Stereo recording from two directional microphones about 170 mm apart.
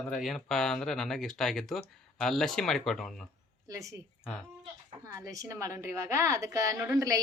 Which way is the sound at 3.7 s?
20° right (ahead or behind).